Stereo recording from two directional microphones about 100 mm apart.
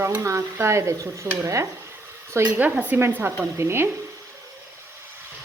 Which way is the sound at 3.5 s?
25° right (ahead or behind).